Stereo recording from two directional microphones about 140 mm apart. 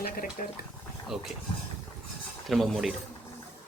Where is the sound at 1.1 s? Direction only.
5° right (ahead or behind).